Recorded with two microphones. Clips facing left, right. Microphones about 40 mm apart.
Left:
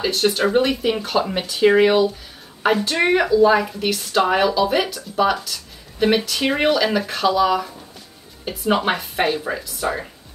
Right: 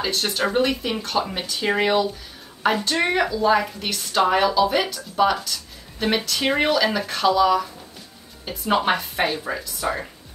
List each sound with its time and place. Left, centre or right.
0.0 s speech: centre